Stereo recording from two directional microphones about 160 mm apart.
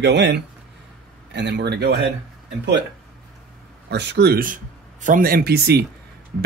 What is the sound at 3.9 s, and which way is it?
Speech, 90° right.